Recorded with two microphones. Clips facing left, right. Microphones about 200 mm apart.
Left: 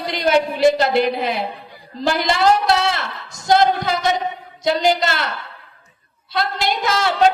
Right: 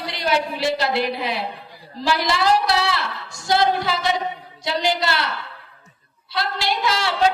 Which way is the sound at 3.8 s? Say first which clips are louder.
Left 3 dB; 45° left (ahead or behind).